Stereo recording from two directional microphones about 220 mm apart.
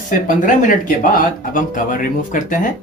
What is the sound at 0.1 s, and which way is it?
Speech, 35° left (ahead or behind).